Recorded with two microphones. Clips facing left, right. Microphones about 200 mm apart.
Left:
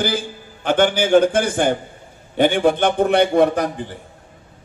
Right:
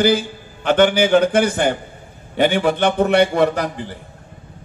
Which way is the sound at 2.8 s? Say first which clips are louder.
Right 1 dB; 60° right (ahead or behind).